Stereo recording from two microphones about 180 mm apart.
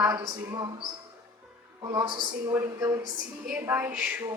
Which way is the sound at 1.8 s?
20° right (ahead or behind).